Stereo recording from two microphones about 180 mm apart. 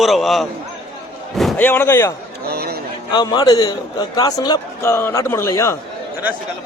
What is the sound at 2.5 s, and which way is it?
Speech, 60° right (ahead or behind).